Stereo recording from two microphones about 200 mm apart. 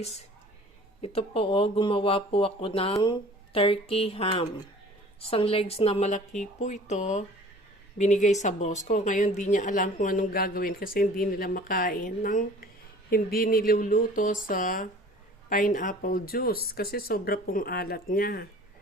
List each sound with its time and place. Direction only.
1.0 s speech: 30° left (ahead or behind); by 18.4 s 45° left (ahead or behind)